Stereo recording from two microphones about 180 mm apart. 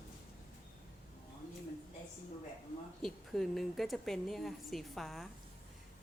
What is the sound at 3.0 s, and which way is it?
A woman's voice, centre (ahead or behind).